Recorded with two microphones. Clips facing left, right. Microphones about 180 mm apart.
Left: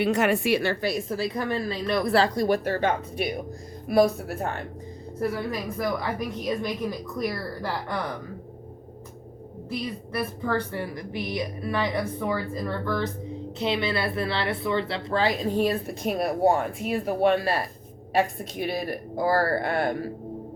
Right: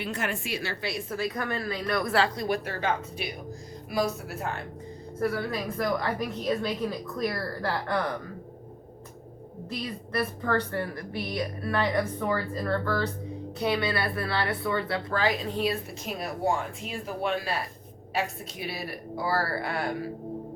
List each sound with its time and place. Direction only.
0.0 s a woman's voice: 70° left (ahead or behind); by 4.1 s 55° left (ahead or behind)
5.5 s a woman's voice: 15° left (ahead or behind)
9.8 s a woman's voice: 15° left (ahead or behind)
15.5 s a woman's voice: 45° left (ahead or behind)